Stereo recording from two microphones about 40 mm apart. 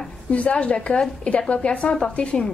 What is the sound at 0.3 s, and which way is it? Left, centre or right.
A woman's voice, left.